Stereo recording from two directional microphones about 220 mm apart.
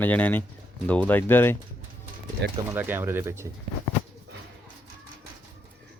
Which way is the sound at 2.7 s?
10° right (ahead or behind).